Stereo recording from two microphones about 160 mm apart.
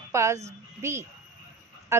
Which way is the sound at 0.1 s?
20° right (ahead or behind).